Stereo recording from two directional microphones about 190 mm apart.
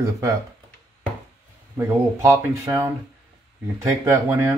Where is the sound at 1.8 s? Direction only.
15° right (ahead or behind).